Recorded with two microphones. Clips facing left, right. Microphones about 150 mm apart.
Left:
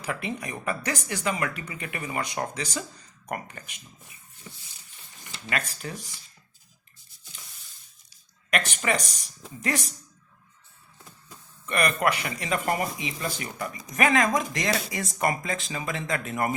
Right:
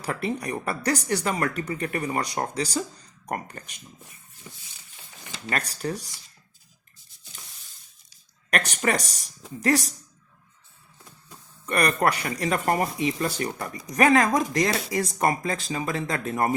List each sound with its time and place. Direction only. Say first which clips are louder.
0.0 s speech: right 4 dB; 40° right (ahead or behind)
5.5 s speech: right 3 dB; 40° right (ahead or behind)
8.4 s speech: right 2 dB; 40° right (ahead or behind)
11.6 s speech: right 2 dB; 35° right (ahead or behind)